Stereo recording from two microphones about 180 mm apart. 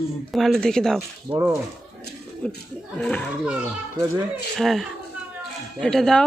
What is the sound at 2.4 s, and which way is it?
Speech, 5° left (ahead or behind).